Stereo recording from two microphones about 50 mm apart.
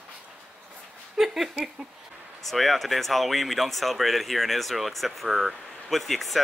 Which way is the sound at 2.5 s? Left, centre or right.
Centre.